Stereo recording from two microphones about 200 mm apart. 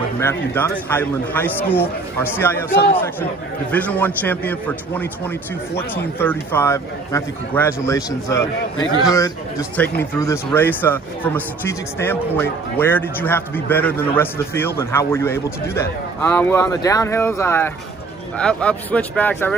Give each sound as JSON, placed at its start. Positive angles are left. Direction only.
{"t": 0.2, "sound": "speech", "side_deg": 10}